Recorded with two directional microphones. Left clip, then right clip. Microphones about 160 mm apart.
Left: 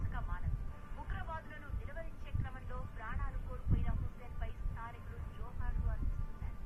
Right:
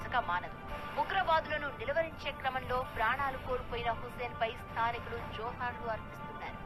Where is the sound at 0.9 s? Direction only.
40° right (ahead or behind).